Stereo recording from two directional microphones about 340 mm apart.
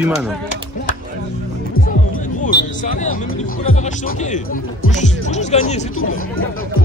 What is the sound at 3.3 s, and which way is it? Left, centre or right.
A man's voice, centre.